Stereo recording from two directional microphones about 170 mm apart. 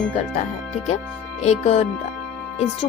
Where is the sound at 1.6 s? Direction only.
40° left (ahead or behind).